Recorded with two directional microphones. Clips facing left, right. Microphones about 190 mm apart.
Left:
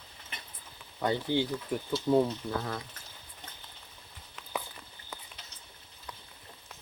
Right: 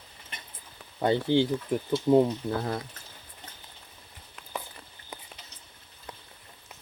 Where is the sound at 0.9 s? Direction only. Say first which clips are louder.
Right 5 dB; 25° right (ahead or behind).